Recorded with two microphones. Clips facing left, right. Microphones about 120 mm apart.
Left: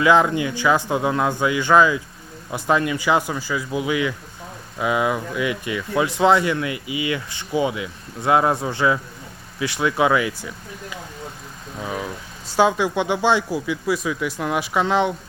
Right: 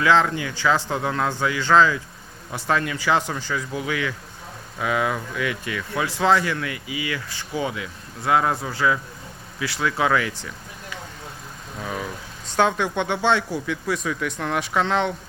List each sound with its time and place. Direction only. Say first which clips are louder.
0.0 s speech: left 3 dB; 15° left (ahead or behind)
11.8 s vehicle: left 2 dB; 10° left (ahead or behind)
12.5 s speech: left 3 dB; 10° left (ahead or behind)